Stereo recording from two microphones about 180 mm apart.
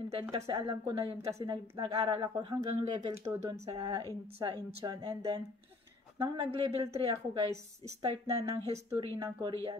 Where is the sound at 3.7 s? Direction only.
30° right (ahead or behind).